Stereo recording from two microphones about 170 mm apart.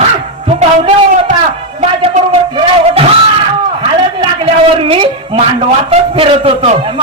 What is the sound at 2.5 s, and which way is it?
Music, 30° right (ahead or behind).